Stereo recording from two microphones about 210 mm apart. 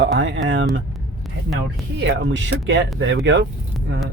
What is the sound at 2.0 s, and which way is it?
Speech, 60° right (ahead or behind).